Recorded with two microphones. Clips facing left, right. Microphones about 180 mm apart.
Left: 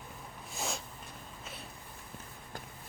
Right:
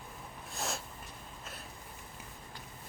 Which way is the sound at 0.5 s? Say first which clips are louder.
Even; centre (ahead or behind).